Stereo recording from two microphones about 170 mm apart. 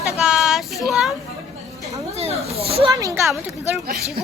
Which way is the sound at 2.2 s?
35° right (ahead or behind).